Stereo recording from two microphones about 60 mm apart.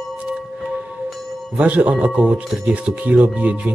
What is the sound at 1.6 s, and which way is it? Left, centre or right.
Speech, right.